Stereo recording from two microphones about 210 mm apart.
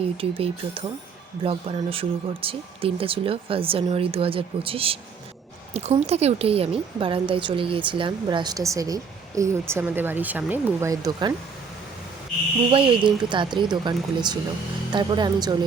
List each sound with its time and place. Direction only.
0.2 s a woman's voice: 25° right (ahead or behind)
12.7 s a woman's voice: 25° right (ahead or behind)